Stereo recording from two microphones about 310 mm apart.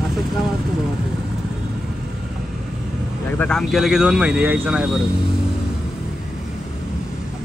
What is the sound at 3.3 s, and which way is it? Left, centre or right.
Speech, centre.